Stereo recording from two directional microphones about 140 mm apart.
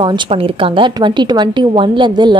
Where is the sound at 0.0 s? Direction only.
40° right (ahead or behind).